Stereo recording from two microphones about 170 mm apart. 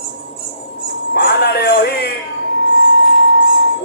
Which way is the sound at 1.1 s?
70° left (ahead or behind).